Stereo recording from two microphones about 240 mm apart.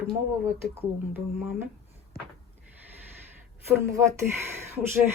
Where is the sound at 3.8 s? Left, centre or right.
Centre.